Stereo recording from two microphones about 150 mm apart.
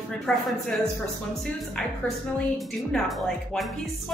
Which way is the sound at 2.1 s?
Centre (ahead or behind).